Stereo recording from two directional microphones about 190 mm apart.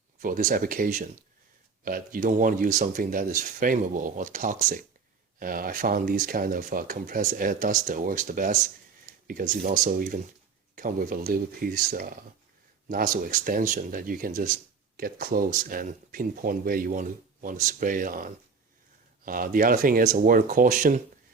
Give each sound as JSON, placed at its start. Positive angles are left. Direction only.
{"t": 0.2, "sound": "speech", "side_deg": -45}